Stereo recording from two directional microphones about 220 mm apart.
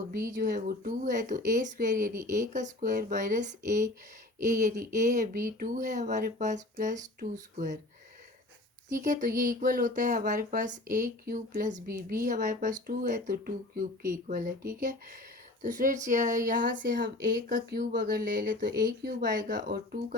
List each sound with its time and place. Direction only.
0.3 s speech: 35° right (ahead or behind)
8.9 s speech: 35° right (ahead or behind)